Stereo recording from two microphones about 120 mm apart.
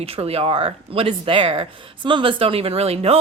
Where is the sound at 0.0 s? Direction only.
55° right (ahead or behind).